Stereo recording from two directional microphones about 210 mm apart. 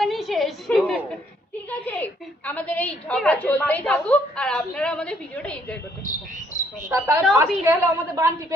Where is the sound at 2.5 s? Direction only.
5° left (ahead or behind).